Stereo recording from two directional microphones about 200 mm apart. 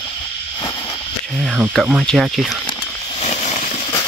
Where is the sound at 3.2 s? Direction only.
35° left (ahead or behind).